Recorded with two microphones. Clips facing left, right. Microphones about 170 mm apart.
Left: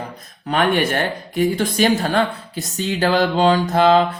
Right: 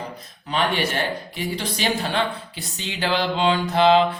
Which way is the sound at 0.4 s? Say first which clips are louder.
Left 5 dB; 55° left (ahead or behind).